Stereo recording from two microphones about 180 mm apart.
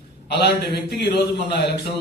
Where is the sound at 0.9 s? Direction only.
65° left (ahead or behind).